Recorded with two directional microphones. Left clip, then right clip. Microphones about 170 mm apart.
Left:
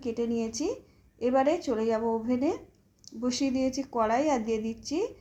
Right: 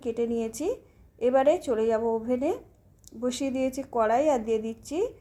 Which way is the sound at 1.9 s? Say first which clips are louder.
Right 2 dB; 30° right (ahead or behind).